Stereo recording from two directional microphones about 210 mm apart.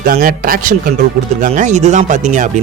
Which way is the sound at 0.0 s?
45° right (ahead or behind).